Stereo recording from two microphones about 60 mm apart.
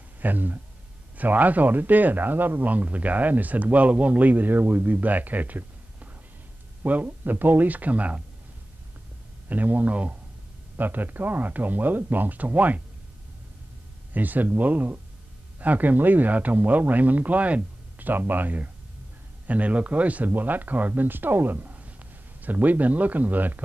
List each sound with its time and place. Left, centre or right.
0.2 s speech: right
9.5 s speech: right
14.1 s speech: right